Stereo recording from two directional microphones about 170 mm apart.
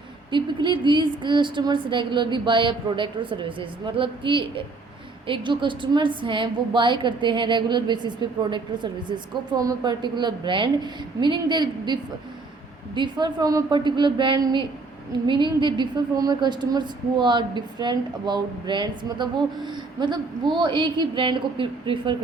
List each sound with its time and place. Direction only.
0.3 s a woman's voice: 30° right (ahead or behind)